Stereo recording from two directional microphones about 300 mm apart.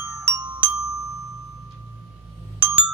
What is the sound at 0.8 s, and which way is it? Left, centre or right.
Glockenspiel, left.